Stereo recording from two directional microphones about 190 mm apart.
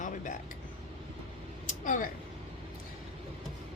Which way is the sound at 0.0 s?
45° left (ahead or behind).